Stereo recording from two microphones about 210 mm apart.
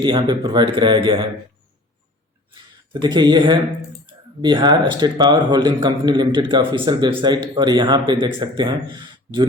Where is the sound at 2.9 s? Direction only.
20° right (ahead or behind).